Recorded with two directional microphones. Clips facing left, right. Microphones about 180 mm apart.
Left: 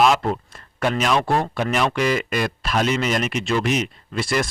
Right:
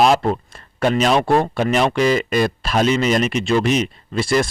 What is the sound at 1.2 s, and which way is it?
Speech, 20° right (ahead or behind).